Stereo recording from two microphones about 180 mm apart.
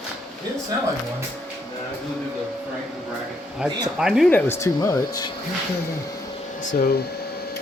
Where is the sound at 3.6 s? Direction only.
5° right (ahead or behind).